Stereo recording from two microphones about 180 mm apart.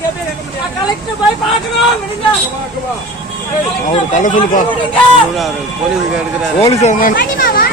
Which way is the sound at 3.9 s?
45° left (ahead or behind).